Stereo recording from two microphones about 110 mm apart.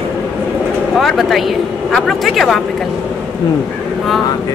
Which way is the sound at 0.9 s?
Centre (ahead or behind).